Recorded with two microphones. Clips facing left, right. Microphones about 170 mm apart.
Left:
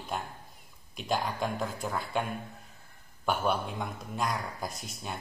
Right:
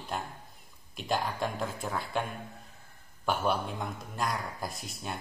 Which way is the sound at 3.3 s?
Centre (ahead or behind).